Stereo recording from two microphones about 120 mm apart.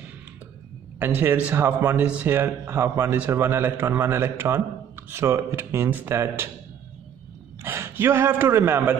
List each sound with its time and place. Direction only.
0.9 s speech: 15° right (ahead or behind)
7.6 s a man's voice: 15° right (ahead or behind)